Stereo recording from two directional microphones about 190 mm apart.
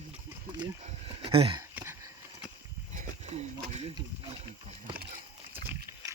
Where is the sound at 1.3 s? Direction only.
30° right (ahead or behind).